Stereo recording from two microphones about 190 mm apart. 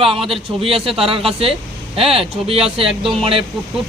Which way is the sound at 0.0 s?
30° right (ahead or behind).